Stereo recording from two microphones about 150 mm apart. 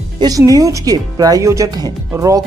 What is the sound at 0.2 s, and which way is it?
Speech, 25° right (ahead or behind).